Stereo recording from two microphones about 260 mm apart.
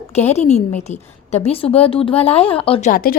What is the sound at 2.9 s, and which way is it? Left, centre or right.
Speech, left.